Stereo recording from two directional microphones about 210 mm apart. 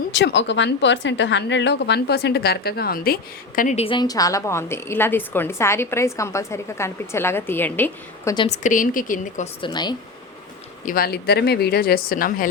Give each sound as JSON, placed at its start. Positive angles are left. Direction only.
{"t": 0.1, "sound": "a woman's voice", "side_deg": 55}
{"t": 8.4, "sound": "a woman's voice", "side_deg": 35}
{"t": 9.6, "sound": "speech", "side_deg": 20}
{"t": 10.8, "sound": "a woman's voice", "side_deg": 45}